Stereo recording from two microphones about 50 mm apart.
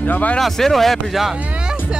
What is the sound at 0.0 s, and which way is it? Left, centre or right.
Speech, left.